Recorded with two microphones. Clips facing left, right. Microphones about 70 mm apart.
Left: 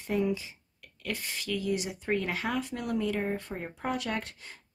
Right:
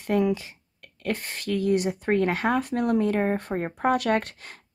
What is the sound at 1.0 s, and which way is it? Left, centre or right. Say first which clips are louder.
Speech: right 6 dB; right.